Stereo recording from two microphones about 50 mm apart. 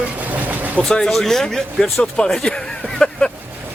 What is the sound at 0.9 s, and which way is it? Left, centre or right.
Speech, centre.